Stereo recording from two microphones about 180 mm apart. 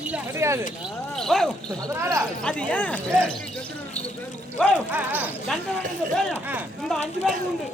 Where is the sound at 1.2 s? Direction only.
Centre (ahead or behind).